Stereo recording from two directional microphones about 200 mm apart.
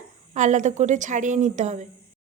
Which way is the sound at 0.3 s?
35° right (ahead or behind).